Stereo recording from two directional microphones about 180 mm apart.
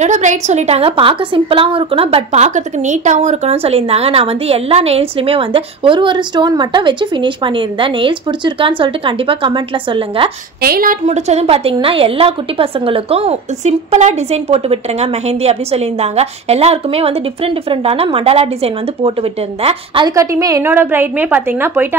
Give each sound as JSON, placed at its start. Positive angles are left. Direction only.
{"t": 0.0, "sound": "a woman's voice", "side_deg": -40}
{"t": 10.6, "sound": "speech", "side_deg": -55}
{"t": 11.1, "sound": "a woman's voice", "side_deg": -35}
{"t": 20.2, "sound": "a woman's voice", "side_deg": -20}